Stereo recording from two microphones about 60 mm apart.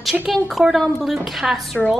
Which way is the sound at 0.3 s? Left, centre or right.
Centre.